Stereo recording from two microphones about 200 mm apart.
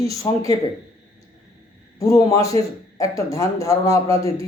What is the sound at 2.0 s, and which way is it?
A man's voice, 15° left (ahead or behind).